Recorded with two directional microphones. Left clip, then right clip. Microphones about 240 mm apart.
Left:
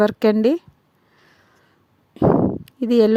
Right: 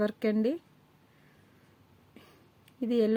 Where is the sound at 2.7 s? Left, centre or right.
Left.